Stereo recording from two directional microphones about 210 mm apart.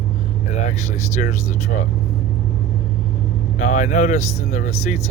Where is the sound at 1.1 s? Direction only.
35° left (ahead or behind).